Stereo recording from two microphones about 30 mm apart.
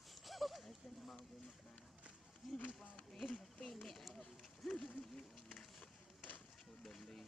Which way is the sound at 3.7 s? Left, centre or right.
Centre.